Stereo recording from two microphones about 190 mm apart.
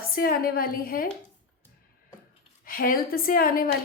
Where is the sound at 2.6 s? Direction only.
50° left (ahead or behind).